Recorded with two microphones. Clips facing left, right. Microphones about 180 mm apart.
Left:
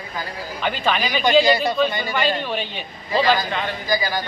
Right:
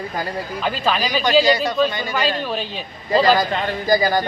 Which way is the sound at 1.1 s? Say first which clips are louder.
Even; centre (ahead or behind).